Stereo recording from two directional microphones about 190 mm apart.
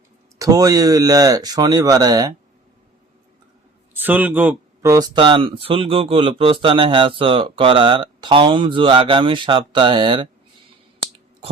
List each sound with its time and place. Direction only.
0.3 s speech: 20° right (ahead or behind)
3.9 s speech: 10° right (ahead or behind); by 10.2 s 25° right (ahead or behind)